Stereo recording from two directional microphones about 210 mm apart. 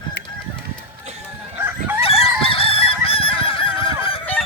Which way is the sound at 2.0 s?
25° left (ahead or behind).